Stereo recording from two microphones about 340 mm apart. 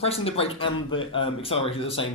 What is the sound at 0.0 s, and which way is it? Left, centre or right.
Speech, centre.